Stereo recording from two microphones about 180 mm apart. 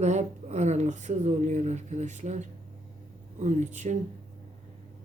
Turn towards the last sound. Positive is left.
turn(degrees=-40)  # may be behind; listen again after turning